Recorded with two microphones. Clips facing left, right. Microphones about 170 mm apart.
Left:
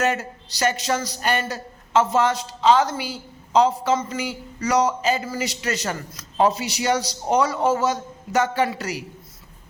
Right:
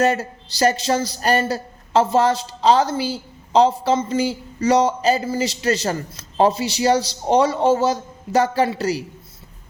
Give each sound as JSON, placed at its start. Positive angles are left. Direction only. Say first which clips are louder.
{"t": 0.0, "sound": "speech", "louder": "right 4 dB", "side_deg": -35}